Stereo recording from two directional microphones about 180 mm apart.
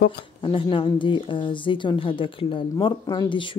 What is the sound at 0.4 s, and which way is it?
Speech, 30° left (ahead or behind).